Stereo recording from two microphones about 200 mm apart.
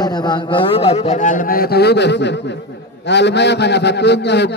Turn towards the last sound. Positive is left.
turn(degrees=55)  # may be behind; listen again after turning